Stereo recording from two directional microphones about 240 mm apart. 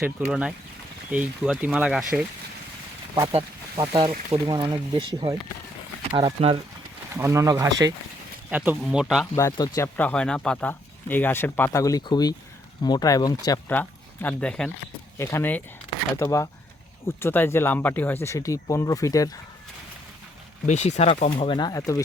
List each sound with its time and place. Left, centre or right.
0.0 s speech: centre
3.2 s speech: centre
9.6 s speech: centre
20.7 s speech: left